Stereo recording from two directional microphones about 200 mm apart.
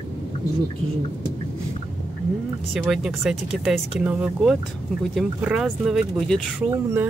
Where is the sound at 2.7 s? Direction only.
Centre (ahead or behind).